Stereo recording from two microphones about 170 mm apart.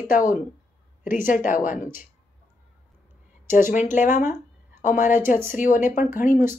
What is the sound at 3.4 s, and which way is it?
A woman's voice, 50° left (ahead or behind).